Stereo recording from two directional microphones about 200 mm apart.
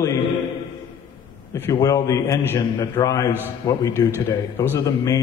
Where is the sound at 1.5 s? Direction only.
15° left (ahead or behind).